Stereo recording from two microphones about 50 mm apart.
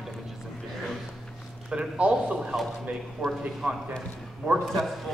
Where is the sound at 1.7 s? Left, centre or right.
Right.